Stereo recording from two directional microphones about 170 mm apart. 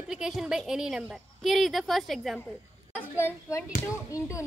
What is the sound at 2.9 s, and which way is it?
A woman's voice, 15° left (ahead or behind).